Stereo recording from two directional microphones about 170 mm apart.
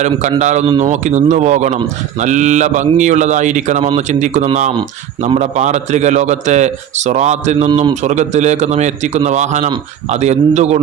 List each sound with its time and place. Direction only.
0.0 s speech: 45° right (ahead or behind)